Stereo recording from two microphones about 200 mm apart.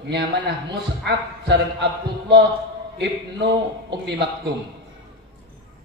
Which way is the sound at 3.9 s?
60° right (ahead or behind).